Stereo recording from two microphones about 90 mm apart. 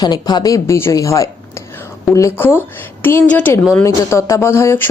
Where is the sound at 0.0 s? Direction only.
50° left (ahead or behind).